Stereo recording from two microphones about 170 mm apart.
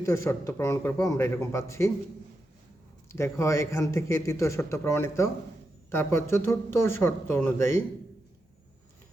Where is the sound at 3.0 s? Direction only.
15° left (ahead or behind).